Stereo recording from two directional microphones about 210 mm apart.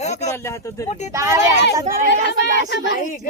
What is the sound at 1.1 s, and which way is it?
Speech, 15° right (ahead or behind).